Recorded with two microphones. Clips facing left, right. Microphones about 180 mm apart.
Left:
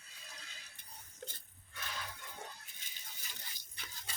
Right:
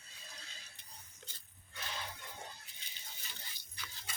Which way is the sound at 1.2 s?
55° left (ahead or behind).